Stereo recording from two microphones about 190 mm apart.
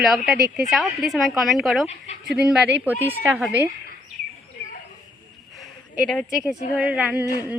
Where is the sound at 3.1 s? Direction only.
10° right (ahead or behind).